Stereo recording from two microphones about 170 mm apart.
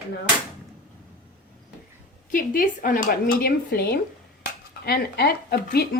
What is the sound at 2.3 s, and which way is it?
Speech, 55° left (ahead or behind).